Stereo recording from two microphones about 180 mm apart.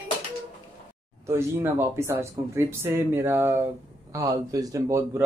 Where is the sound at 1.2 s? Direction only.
15° right (ahead or behind).